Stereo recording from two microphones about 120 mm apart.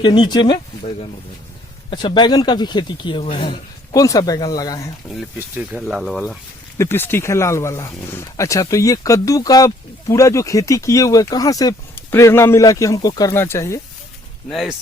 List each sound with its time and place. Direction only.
0.0 s speech: 40° left (ahead or behind)
1.9 s speech: 45° left (ahead or behind)
3.9 s speech: 30° left (ahead or behind)
5.0 s speech: 5° left (ahead or behind)
5.5 s speech: 5° right (ahead or behind)
6.7 s speech: 20° left (ahead or behind)
11.9 s speech: 20° left (ahead or behind)
13.3 s speech: 20° left (ahead or behind)
14.5 s speech: centre (ahead or behind)